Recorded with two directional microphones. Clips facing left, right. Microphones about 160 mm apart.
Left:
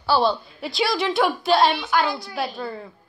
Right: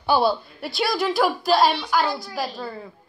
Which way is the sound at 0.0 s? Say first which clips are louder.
Even; 15° right (ahead or behind).